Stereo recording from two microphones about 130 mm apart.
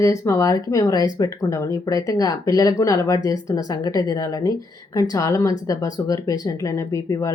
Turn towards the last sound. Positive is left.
turn(degrees=25)  # may be behind; listen again after turning